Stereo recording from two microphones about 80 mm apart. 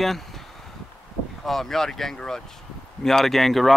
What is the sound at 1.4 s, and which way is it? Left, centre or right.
Speech, centre.